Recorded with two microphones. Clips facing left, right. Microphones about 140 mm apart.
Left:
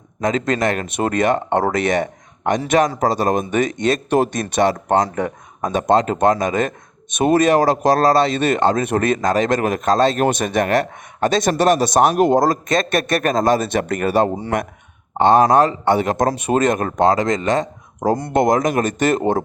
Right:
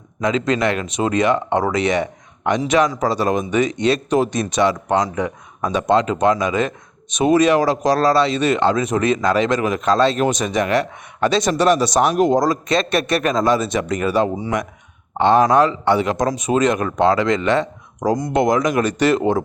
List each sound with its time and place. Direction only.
0.2 s speech: 45° left (ahead or behind)
15.2 s speech: 45° left (ahead or behind)